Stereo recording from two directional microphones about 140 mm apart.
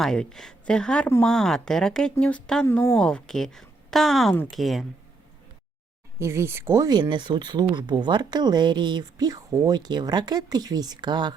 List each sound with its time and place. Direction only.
0.0 s speech: 5° left (ahead or behind)
2.6 s speech: 20° left (ahead or behind)
2.9 s speech: 5° left (ahead or behind)
6.1 s speech: 20° right (ahead or behind)